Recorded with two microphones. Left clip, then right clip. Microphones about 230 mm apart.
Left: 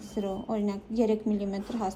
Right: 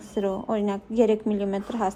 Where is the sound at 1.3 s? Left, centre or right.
Right.